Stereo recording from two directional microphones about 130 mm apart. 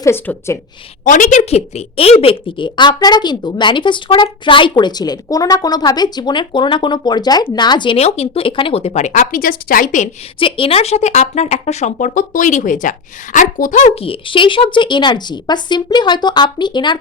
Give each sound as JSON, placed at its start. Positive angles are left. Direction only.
{"t": 0.0, "sound": "a woman's voice", "side_deg": 20}
{"t": 1.0, "sound": "a woman's voice", "side_deg": 75}
{"t": 7.9, "sound": "speech", "side_deg": 55}
{"t": 10.4, "sound": "speech", "side_deg": 45}
{"t": 13.9, "sound": "a woman's voice", "side_deg": 45}